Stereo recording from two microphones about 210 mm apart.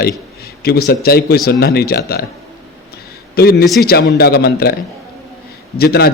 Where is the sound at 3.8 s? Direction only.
50° left (ahead or behind).